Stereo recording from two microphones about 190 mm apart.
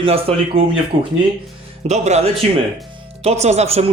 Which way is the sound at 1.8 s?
35° right (ahead or behind).